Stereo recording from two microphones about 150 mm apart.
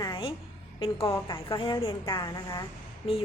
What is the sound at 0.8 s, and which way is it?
A woman's voice, 35° left (ahead or behind).